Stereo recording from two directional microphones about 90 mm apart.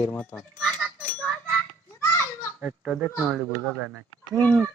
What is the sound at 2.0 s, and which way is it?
Children playing, 35° left (ahead or behind).